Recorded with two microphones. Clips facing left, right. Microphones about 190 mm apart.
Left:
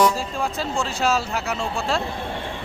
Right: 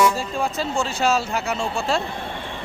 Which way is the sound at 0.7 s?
Centre (ahead or behind).